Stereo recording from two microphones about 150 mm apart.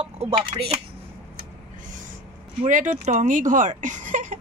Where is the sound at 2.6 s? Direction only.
55° right (ahead or behind).